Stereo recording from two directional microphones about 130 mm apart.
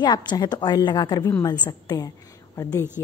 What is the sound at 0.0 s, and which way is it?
A woman's voice, 35° left (ahead or behind).